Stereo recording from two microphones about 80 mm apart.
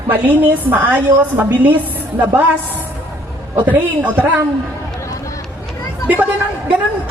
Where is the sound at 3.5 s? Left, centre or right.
Right.